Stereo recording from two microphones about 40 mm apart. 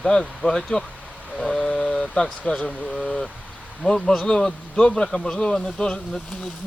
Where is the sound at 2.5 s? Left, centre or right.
Left.